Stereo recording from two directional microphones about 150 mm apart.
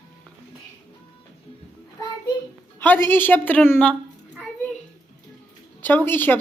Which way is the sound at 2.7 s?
10° left (ahead or behind).